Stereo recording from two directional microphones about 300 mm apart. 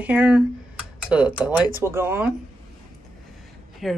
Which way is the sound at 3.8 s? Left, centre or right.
Centre.